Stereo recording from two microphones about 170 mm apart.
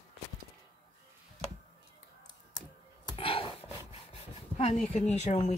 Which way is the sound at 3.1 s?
30° left (ahead or behind).